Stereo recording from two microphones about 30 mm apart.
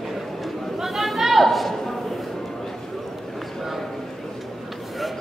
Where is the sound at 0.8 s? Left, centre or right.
Centre.